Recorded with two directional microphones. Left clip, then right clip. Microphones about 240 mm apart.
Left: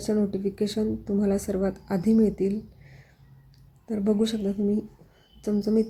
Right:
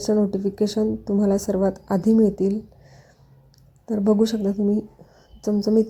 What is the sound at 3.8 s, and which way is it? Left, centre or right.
Speech, centre.